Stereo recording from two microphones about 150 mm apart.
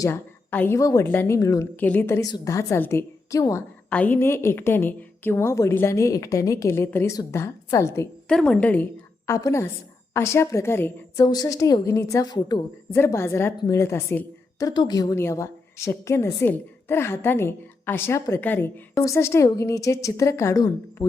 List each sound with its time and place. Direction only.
0.0 s a woman's voice: 15° left (ahead or behind)
3.8 s a woman's voice: 10° left (ahead or behind)
8.3 s a woman's voice: 5° left (ahead or behind); by 12.6 s 30° left (ahead or behind)
12.9 s a woman's voice: 15° left (ahead or behind)
14.7 s a woman's voice: 30° left (ahead or behind)